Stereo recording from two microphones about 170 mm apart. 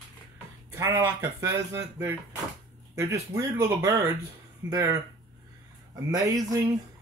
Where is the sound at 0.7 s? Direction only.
20° right (ahead or behind).